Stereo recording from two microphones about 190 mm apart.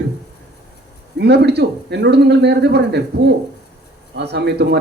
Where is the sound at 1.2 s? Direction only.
60° right (ahead or behind).